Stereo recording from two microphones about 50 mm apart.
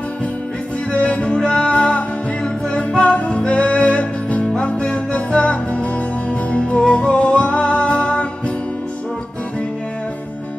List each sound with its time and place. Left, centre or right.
0.9 s music: left